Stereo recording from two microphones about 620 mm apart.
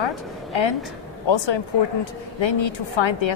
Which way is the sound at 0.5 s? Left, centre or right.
Left.